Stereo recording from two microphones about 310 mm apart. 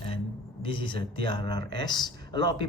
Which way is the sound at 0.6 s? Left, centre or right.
Centre.